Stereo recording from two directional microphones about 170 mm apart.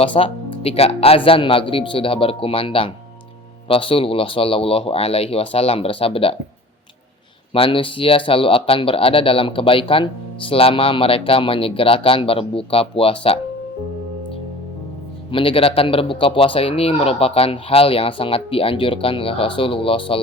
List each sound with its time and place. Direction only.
0.0 s speech: 30° left (ahead or behind)
7.5 s speech: 30° left (ahead or behind)
15.3 s speech: 30° left (ahead or behind)